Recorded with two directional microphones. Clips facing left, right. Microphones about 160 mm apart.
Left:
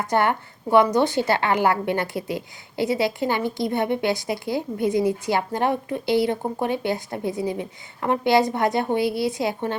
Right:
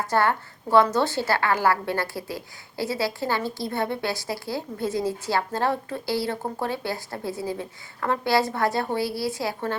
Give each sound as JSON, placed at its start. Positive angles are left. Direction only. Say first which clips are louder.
{"t": 0.1, "sound": "a woman's voice", "louder": "left 1 dB", "side_deg": 20}